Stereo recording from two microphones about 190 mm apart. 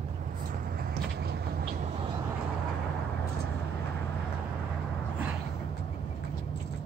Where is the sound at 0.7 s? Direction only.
60° right (ahead or behind).